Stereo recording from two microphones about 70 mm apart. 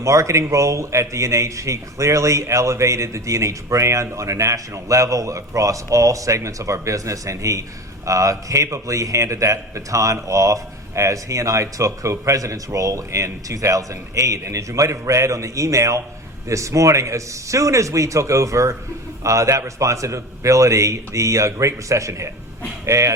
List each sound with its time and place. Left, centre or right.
0.0 s a man's voice: right